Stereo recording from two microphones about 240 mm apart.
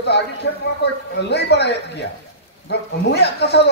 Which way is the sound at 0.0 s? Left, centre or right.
Left.